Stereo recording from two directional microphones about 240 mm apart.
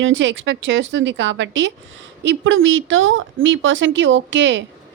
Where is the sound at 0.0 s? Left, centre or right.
Right.